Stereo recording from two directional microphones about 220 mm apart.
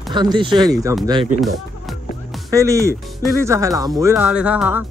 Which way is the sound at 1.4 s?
Centre (ahead or behind).